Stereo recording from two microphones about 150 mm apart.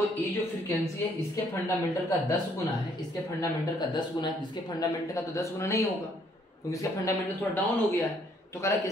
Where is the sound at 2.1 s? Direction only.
20° left (ahead or behind).